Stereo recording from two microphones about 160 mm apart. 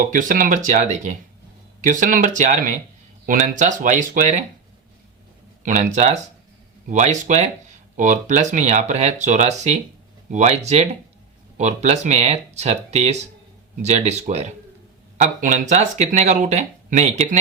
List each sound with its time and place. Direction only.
0.0 s speech: 55° right (ahead or behind)
5.6 s speech: 50° right (ahead or behind)